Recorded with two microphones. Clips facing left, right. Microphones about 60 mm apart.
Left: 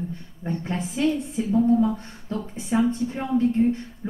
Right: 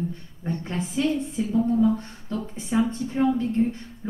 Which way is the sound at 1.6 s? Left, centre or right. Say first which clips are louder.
Left 1 dB; centre.